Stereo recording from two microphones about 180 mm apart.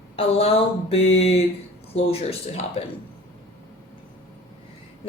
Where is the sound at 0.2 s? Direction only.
30° left (ahead or behind).